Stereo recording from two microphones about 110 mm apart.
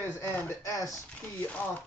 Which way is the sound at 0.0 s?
20° left (ahead or behind).